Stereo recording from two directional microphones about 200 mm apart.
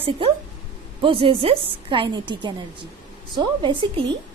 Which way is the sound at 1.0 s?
25° right (ahead or behind).